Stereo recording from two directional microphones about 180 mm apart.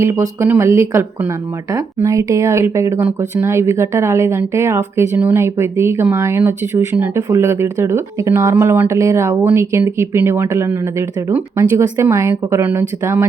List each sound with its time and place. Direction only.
0.3 s speech: 15° right (ahead or behind)